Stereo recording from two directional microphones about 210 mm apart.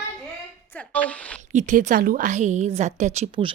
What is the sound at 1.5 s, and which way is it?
A woman's voice, 40° right (ahead or behind).